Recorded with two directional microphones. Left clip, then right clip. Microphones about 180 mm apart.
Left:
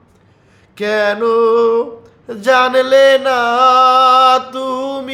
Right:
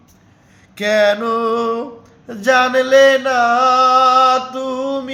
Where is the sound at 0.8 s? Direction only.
10° left (ahead or behind).